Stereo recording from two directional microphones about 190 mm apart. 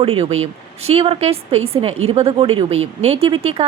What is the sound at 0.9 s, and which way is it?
A woman's voice, 30° right (ahead or behind).